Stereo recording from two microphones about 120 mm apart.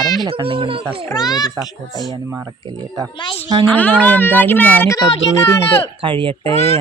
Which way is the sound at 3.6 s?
10° left (ahead or behind).